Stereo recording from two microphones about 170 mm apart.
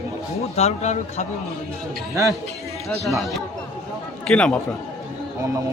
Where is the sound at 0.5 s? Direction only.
40° left (ahead or behind).